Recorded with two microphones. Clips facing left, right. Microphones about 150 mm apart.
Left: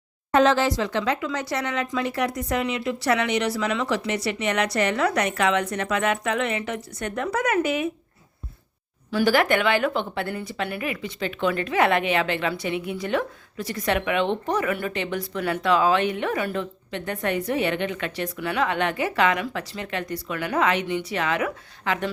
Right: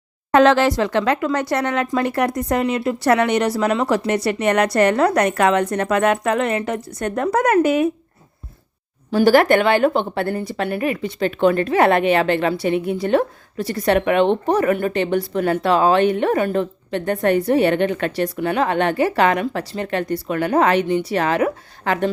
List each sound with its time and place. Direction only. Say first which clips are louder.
0.3 s a woman's voice: right 5 dB; 75° right (ahead or behind); by 7.9 s 45° right (ahead or behind)
9.1 s a woman's voice: right 7 dB; 40° right (ahead or behind)
15.3 s a woman's voice: right 7 dB; 45° right (ahead or behind)
15.6 s a woman's voice: right 4 dB; 35° right (ahead or behind)